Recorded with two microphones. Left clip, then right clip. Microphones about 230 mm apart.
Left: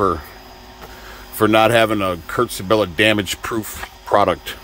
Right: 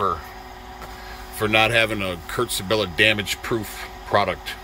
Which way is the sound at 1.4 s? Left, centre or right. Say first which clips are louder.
Left 5 dB; left.